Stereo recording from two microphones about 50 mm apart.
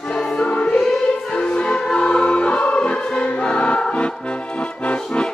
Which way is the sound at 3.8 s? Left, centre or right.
Left.